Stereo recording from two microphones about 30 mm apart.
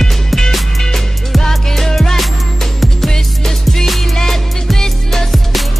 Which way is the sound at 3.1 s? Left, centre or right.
Centre.